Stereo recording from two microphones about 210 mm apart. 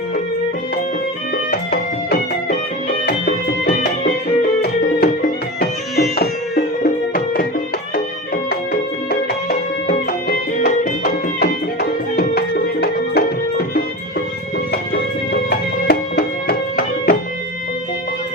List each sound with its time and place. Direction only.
1.5 s music: 45° left (ahead or behind)
4.6 s music: 45° left (ahead or behind)
9.5 s music: 45° left (ahead or behind)
15.4 s music: 50° left (ahead or behind)